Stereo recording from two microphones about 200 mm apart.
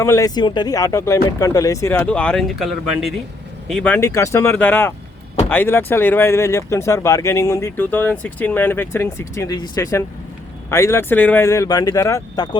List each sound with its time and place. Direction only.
0.0 s speech: 15° left (ahead or behind)